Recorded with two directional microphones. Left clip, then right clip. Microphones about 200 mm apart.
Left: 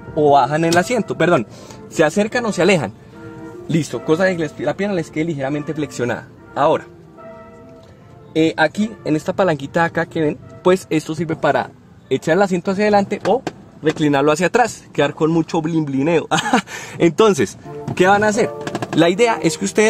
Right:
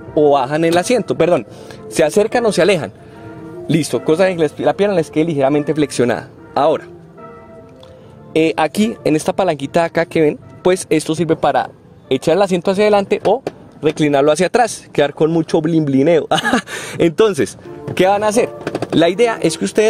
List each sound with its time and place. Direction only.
0.1 s a man's voice: 25° right (ahead or behind)
8.3 s speech: 20° right (ahead or behind)
8.6 s speech: 35° right (ahead or behind)
9.2 s a man's voice: 20° right (ahead or behind)
10.7 s a man's voice: 15° right (ahead or behind)